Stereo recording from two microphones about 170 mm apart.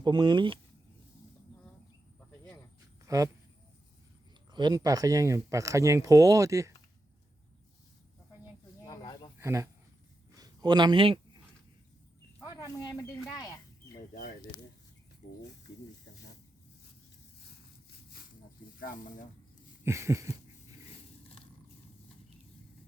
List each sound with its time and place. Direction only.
0.0 s speech: 25° right (ahead or behind)
3.1 s speech: 20° right (ahead or behind)
4.5 s speech: 25° right (ahead or behind)
9.0 s a sound: 25° left (ahead or behind)
9.4 s a man's voice: 20° right (ahead or behind)
12.5 s speech: 20° left (ahead or behind)
14.1 s a sound: 55° left (ahead or behind)
18.8 s speech: 50° left (ahead or behind)
19.8 s a sound: 15° right (ahead or behind)